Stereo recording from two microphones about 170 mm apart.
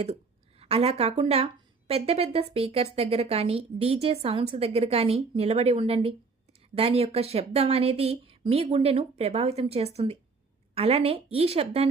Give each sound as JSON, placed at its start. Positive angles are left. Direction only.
{"t": 0.6, "sound": "a woman's voice", "side_deg": -35}